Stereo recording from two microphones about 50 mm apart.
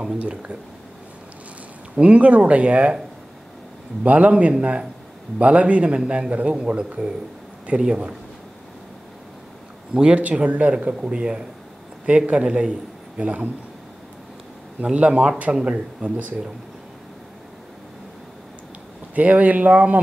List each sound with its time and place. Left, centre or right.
0.0 s speech: right
2.0 s speech: right
4.0 s speech: right
9.9 s speech: centre
12.1 s speech: right
12.4 s a man's voice: centre
13.2 s speech: right
15.0 s speech: right
19.1 s speech: right